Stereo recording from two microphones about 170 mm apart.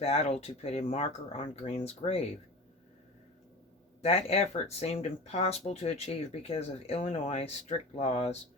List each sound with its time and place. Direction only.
0.0 s speech: 35° left (ahead or behind)
4.0 s speech: 40° left (ahead or behind)